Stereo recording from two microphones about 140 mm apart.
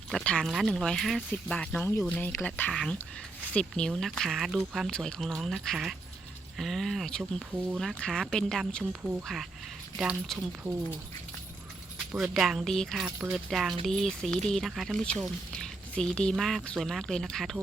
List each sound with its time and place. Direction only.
0.1 s speech: 5° left (ahead or behind)
10.3 s speech: 15° right (ahead or behind)
12.1 s speech: centre (ahead or behind)